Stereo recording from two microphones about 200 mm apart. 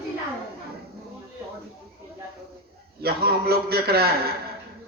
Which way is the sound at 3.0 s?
50° right (ahead or behind).